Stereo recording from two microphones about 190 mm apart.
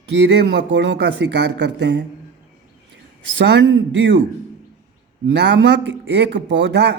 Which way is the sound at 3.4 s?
70° right (ahead or behind).